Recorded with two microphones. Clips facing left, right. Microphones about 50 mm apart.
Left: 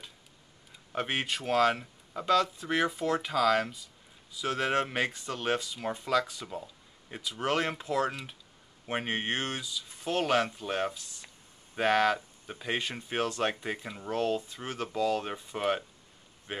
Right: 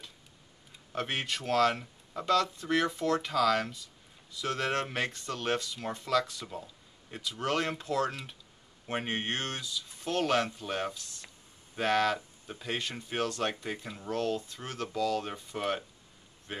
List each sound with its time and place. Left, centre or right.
0.9 s speech: centre